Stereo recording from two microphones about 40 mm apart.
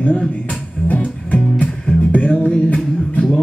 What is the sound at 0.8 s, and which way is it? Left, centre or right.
Music, left.